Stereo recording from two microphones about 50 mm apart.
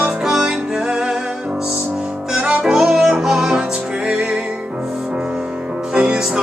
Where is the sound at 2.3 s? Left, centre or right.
Centre.